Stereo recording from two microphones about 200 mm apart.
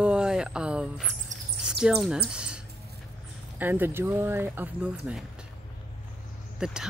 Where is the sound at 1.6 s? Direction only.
5° right (ahead or behind).